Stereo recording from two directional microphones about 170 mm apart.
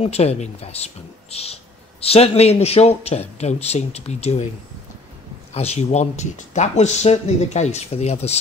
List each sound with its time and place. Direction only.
0.0 s speech: 40° left (ahead or behind)
5.5 s speech: 40° left (ahead or behind)